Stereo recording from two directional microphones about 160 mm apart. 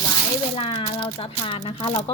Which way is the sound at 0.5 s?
40° left (ahead or behind).